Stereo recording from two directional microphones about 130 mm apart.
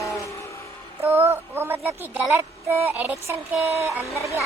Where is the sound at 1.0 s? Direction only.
20° right (ahead or behind).